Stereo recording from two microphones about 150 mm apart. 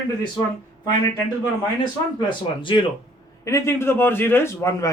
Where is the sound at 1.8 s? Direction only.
35° left (ahead or behind).